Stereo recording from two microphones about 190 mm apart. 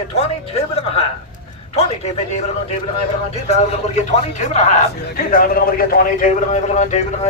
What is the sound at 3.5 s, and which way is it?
Speech, 35° left (ahead or behind).